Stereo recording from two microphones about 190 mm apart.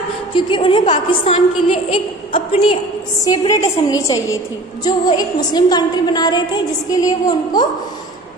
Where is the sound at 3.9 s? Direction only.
20° left (ahead or behind).